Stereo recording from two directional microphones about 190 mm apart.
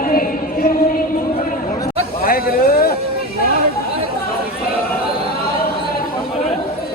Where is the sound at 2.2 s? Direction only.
50° left (ahead or behind).